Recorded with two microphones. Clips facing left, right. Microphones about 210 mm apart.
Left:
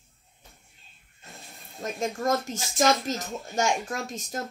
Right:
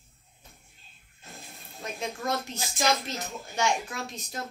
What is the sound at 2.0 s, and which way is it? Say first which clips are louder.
Speech: left 5 dB; 45° left (ahead or behind).